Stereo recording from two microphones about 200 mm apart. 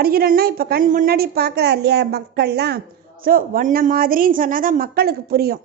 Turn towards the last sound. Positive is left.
turn(degrees=-50)  # may be behind; listen again after turning